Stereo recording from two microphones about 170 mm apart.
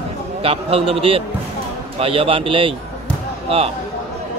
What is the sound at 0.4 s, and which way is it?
Speech, 35° right (ahead or behind).